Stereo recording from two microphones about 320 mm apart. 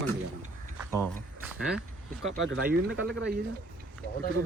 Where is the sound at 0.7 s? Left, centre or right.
Centre.